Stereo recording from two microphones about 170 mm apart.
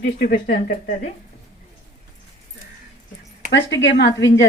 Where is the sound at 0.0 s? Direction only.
60° left (ahead or behind).